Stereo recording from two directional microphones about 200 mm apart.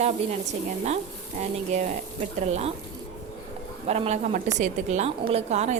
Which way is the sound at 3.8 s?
30° right (ahead or behind).